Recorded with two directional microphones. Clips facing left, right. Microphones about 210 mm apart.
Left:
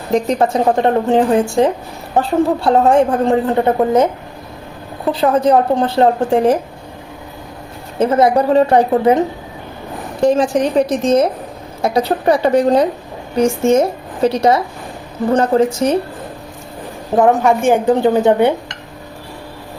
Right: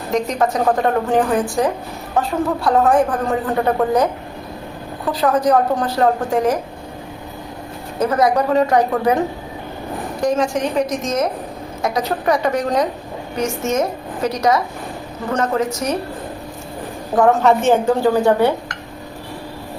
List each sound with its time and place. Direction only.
0.1 s a woman's voice: 30° left (ahead or behind)
5.1 s a woman's voice: 25° left (ahead or behind)
7.9 s a woman's voice: 25° left (ahead or behind)
17.2 s a woman's voice: 15° left (ahead or behind)